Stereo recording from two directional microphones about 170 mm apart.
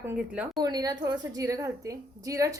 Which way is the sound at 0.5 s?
25° right (ahead or behind).